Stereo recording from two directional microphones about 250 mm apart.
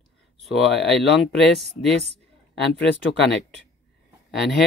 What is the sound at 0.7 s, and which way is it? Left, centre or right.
Speech, left.